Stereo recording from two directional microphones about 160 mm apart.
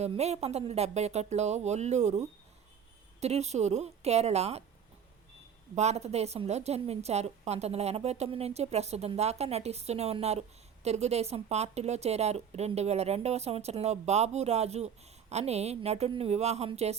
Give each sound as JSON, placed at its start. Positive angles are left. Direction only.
{"t": 0.0, "sound": "speech", "side_deg": -45}
{"t": 5.7, "sound": "a woman's voice", "side_deg": -45}